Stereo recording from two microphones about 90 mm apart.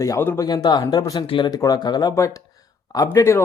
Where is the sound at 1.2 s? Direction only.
65° left (ahead or behind).